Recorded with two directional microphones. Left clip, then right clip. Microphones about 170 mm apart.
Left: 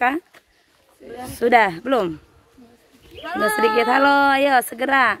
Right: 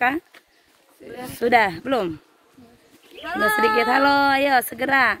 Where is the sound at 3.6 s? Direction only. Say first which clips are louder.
Left 3 dB; 10° left (ahead or behind).